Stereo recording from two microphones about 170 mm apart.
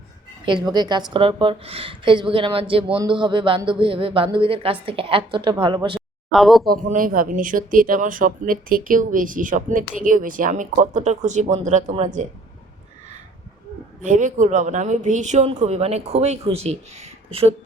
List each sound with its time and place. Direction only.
0.4 s speech: 25° right (ahead or behind)
6.3 s speech: centre (ahead or behind)
6.7 s speech: 55° right (ahead or behind)
14.0 s speech: 50° right (ahead or behind)